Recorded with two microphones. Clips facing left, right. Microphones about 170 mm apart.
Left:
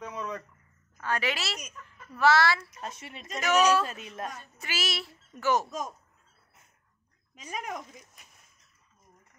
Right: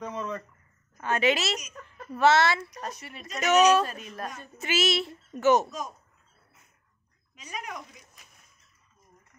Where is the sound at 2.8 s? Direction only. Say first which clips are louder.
Right 2 dB; 25° left (ahead or behind).